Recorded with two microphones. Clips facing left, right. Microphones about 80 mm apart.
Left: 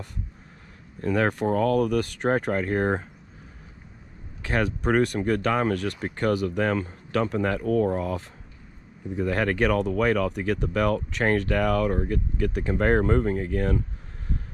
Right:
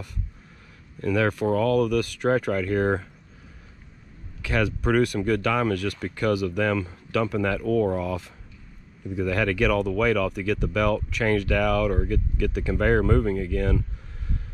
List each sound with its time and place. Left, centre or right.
1.0 s speech: left
4.8 s speech: left